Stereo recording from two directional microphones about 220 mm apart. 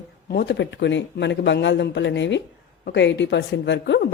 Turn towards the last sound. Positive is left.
turn(degrees=50)  # may be behind; listen again after turning